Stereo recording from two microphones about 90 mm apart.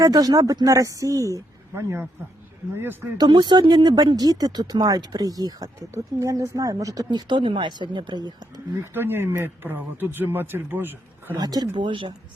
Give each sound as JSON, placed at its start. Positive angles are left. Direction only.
{"t": 0.0, "sound": "a man's voice", "side_deg": -45}
{"t": 3.2, "sound": "speech", "side_deg": -60}
{"t": 7.3, "sound": "speech", "side_deg": -65}
{"t": 8.8, "sound": "a man's voice", "side_deg": -25}
{"t": 11.3, "sound": "speech", "side_deg": -50}
{"t": 11.7, "sound": "speech", "side_deg": -70}